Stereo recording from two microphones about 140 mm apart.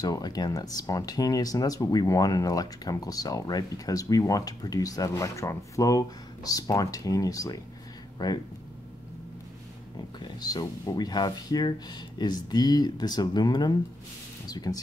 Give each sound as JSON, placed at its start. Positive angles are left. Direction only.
{"t": 0.0, "sound": "speech", "side_deg": 25}
{"t": 10.1, "sound": "speech", "side_deg": 30}